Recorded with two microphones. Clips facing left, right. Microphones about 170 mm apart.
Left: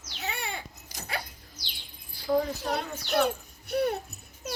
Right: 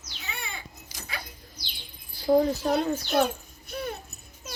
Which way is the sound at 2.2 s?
35° right (ahead or behind).